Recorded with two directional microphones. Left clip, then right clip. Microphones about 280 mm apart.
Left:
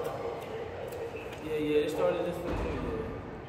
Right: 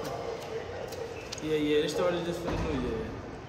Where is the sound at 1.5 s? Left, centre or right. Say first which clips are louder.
Right 2 dB; right.